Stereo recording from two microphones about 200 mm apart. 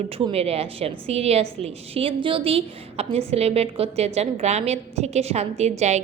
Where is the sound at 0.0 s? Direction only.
30° right (ahead or behind).